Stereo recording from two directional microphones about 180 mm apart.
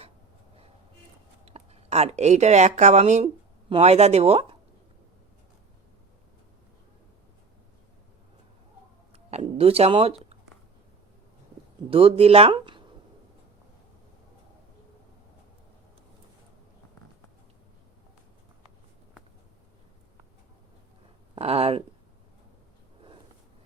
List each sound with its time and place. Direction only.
1.5 s speech: 35° right (ahead or behind)
9.1 s speech: 35° right (ahead or behind)
11.9 s speech: 30° right (ahead or behind)
21.3 s speech: 35° right (ahead or behind)